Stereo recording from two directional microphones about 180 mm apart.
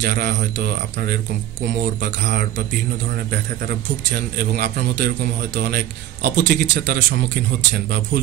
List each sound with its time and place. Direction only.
0.0 s a man's voice: 70° right (ahead or behind)
4.6 s a man's voice: 65° right (ahead or behind)